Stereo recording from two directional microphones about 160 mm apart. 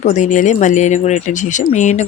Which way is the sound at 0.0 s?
50° left (ahead or behind).